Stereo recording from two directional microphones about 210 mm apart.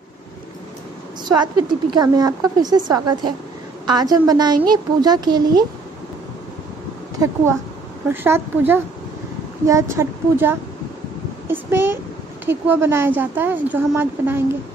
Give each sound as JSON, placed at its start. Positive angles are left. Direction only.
{"t": 1.2, "sound": "a woman's voice", "side_deg": -20}
{"t": 8.1, "sound": "a woman's voice", "side_deg": -10}